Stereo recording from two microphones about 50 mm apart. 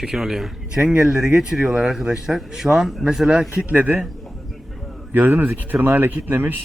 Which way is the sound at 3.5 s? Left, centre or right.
Right.